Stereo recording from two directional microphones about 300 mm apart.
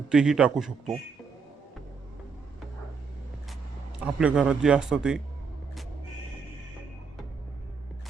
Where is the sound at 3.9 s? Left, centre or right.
Centre.